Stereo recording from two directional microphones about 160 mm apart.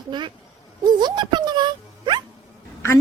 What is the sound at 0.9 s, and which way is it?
Music, 25° right (ahead or behind).